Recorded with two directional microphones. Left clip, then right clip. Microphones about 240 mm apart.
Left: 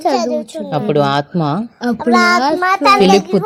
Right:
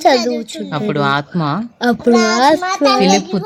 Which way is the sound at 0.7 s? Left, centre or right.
Centre.